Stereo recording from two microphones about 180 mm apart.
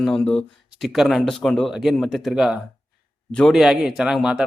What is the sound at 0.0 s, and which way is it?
Speech, 5° left (ahead or behind).